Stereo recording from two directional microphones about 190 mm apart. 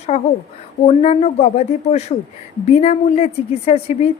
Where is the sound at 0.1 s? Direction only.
40° left (ahead or behind).